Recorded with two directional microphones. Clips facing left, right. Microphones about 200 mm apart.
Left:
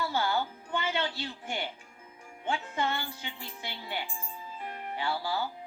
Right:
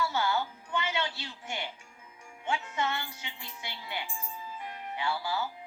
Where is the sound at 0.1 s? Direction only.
35° left (ahead or behind).